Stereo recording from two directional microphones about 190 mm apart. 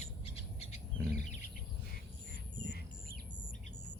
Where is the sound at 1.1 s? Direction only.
40° left (ahead or behind).